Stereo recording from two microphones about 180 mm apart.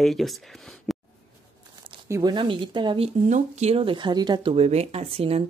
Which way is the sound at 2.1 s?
20° right (ahead or behind).